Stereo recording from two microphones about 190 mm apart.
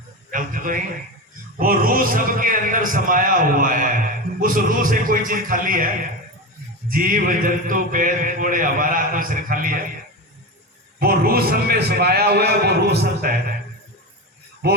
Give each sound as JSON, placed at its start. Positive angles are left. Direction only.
{"t": 0.3, "sound": "a man's voice", "side_deg": -45}
{"t": 1.5, "sound": "a sound", "side_deg": -50}
{"t": 11.0, "sound": "a man's voice", "side_deg": -50}